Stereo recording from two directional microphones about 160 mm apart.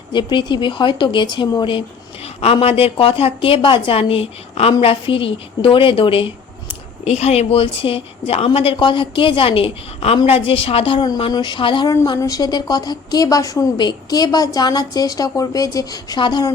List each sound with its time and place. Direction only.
0.1 s a woman's voice: 30° left (ahead or behind)